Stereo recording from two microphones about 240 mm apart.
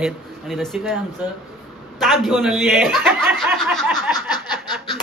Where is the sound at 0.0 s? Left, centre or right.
Centre.